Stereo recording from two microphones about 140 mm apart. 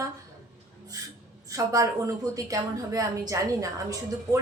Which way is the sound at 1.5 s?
25° right (ahead or behind).